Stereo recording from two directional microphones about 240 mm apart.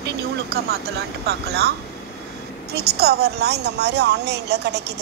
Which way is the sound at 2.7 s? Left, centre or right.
Right.